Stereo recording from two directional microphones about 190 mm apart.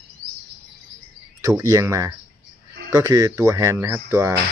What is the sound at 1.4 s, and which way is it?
Speech, 15° right (ahead or behind).